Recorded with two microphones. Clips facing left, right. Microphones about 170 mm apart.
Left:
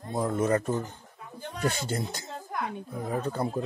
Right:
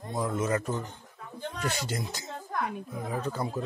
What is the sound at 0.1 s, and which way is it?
Speech, 45° left (ahead or behind).